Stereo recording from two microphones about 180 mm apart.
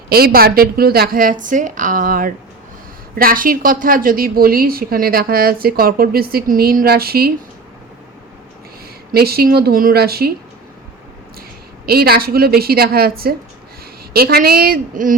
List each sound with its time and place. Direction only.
0.1 s a woman's voice: 55° right (ahead or behind)
9.1 s a woman's voice: 60° right (ahead or behind)
11.9 s a woman's voice: 60° right (ahead or behind)